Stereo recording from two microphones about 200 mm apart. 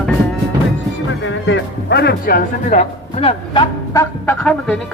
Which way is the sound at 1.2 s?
65° left (ahead or behind).